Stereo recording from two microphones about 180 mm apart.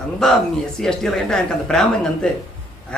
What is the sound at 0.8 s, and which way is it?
A man's voice, 5° left (ahead or behind).